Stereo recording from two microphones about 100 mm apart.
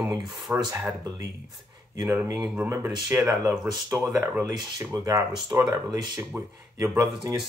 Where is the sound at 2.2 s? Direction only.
40° right (ahead or behind).